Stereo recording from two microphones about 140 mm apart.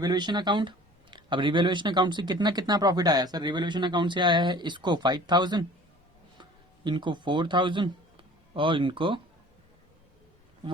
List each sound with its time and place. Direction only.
0.0 s speech: 30° right (ahead or behind)